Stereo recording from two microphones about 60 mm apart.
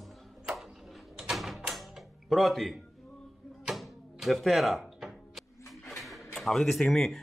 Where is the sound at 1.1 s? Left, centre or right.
Centre.